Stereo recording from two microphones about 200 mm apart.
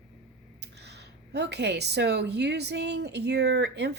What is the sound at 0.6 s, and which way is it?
Speech, 55° right (ahead or behind).